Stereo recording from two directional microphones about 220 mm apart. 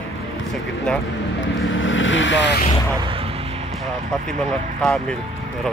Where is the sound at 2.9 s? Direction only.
20° right (ahead or behind).